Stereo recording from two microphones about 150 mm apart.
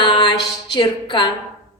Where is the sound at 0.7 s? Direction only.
30° left (ahead or behind).